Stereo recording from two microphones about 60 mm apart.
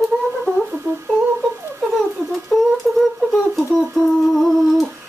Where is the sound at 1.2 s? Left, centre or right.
Right.